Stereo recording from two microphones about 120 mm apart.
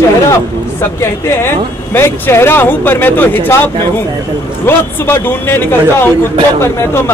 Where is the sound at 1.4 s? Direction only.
20° left (ahead or behind).